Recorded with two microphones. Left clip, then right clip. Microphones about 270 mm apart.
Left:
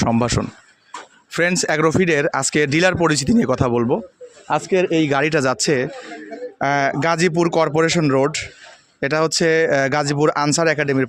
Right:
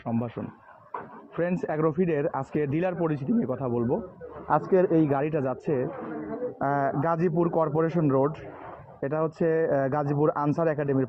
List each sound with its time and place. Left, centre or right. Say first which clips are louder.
0.0 s speech: left 13 dB; left
4.4 s a man's voice: left 4 dB; left